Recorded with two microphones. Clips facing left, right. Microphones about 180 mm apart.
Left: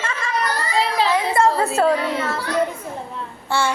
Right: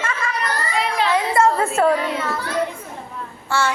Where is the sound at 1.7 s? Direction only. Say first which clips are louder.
Even; 20° left (ahead or behind).